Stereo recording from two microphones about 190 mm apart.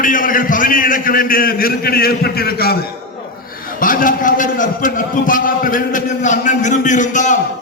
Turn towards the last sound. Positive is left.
turn(degrees=40)  # may be behind; listen again after turning